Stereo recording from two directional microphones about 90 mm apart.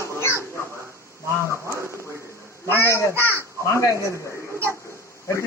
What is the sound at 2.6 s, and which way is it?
A child's voice, 25° left (ahead or behind).